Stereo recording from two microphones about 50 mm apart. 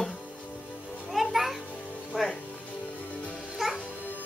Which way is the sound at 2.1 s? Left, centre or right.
Centre.